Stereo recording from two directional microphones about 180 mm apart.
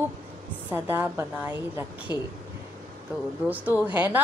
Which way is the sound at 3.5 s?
10° right (ahead or behind).